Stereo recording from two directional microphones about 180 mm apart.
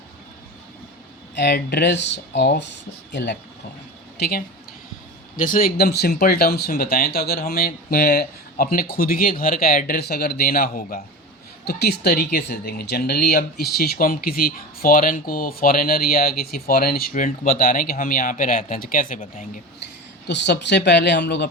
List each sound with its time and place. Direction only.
1.4 s speech: 65° left (ahead or behind)
4.2 s speech: 60° left (ahead or behind)
20.2 s speech: 70° left (ahead or behind)